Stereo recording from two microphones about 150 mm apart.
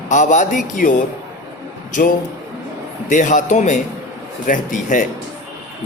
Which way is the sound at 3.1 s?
55° left (ahead or behind).